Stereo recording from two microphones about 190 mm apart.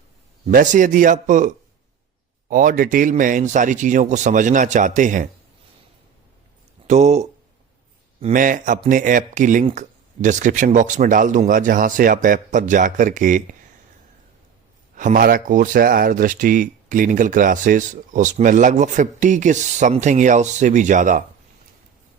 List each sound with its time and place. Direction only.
0.4 s a man's voice: 40° right (ahead or behind)
6.8 s speech: 35° right (ahead or behind)
14.9 s speech: 45° right (ahead or behind)